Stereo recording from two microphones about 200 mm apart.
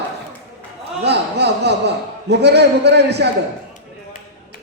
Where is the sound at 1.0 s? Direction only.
55° right (ahead or behind).